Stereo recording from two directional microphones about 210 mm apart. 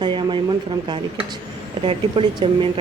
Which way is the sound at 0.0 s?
20° right (ahead or behind).